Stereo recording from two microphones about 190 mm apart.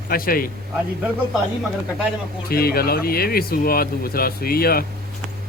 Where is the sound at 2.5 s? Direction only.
55° left (ahead or behind).